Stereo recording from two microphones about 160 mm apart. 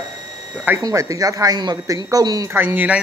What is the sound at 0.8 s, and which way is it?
Speech, 20° right (ahead or behind).